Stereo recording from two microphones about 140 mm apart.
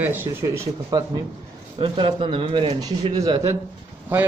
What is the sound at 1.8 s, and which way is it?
Speech, 40° right (ahead or behind).